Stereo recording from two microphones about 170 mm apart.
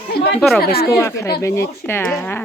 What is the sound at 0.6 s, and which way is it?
Speech, 65° left (ahead or behind).